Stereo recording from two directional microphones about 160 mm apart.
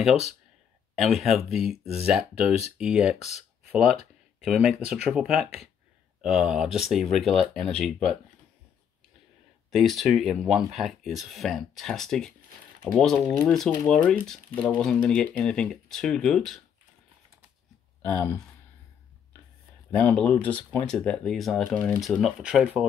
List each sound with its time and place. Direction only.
0.9 s speech: centre (ahead or behind)
3.2 s speech: 45° left (ahead or behind)
4.4 s speech: 5° right (ahead or behind)
9.7 s speech: centre (ahead or behind)
18.0 s speech: 15° left (ahead or behind)
20.0 s speech: 10° left (ahead or behind)